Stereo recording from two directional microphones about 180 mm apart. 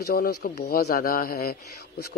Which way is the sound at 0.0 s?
55° left (ahead or behind).